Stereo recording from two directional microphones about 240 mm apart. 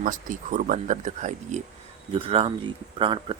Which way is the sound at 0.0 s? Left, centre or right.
Right.